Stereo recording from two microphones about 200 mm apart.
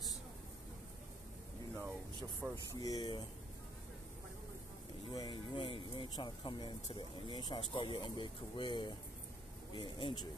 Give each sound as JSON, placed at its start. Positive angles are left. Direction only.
{"t": 2.5, "sound": "speech", "side_deg": 15}
{"t": 5.1, "sound": "speech", "side_deg": 20}